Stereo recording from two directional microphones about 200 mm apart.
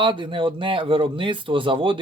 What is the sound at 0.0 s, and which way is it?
Speech, 25° right (ahead or behind).